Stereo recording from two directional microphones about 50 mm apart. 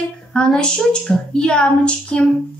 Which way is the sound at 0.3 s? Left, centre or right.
Centre.